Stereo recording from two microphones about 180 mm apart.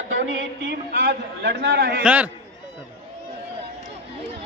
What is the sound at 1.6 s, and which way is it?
Speech, 70° right (ahead or behind).